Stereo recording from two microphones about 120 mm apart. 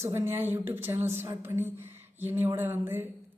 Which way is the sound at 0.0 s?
20° right (ahead or behind).